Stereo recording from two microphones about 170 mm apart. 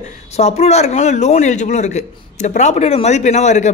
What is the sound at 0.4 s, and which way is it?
Speech, 40° left (ahead or behind).